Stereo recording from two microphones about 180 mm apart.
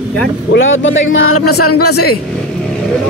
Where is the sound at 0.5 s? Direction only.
90° left.